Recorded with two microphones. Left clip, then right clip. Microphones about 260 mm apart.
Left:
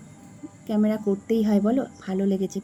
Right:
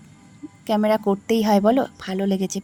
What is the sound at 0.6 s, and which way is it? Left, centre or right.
Speech, right.